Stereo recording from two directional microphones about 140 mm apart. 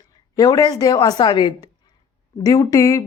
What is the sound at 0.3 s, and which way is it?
A woman's voice, 25° left (ahead or behind).